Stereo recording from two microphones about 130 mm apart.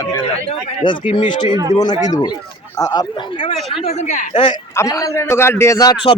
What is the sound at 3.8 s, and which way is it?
Speech, 60° left (ahead or behind).